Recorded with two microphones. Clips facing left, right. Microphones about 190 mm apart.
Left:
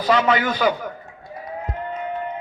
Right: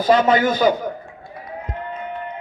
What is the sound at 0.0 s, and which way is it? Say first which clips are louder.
Speech: right 3 dB; 45° right (ahead or behind).